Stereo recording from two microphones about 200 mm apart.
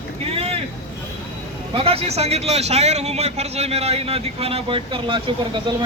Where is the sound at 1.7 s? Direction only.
30° right (ahead or behind).